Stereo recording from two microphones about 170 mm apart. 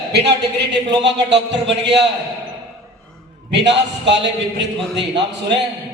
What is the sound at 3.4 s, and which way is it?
A man's voice, 90° right.